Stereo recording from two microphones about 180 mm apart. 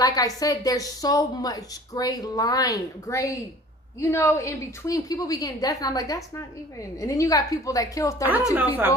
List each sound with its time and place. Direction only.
0.0 s a woman's voice: 20° left (ahead or behind)
8.5 s a woman's voice: 10° right (ahead or behind)